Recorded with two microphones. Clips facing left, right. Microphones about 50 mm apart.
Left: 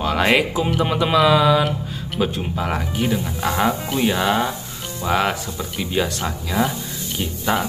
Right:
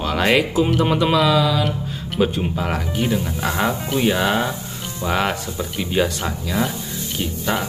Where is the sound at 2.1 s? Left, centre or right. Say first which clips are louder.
Right 2 dB; centre.